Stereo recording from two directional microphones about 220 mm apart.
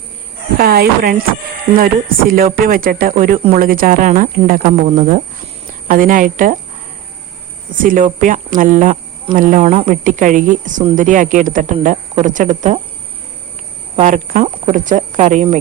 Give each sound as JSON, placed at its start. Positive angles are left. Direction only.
{"t": 0.6, "sound": "speech", "side_deg": -45}
{"t": 2.3, "sound": "speech", "side_deg": -40}
{"t": 7.9, "sound": "speech", "side_deg": -35}
{"t": 13.9, "sound": "speech", "side_deg": -35}